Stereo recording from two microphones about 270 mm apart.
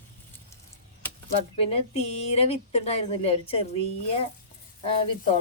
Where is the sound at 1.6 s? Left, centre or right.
Left.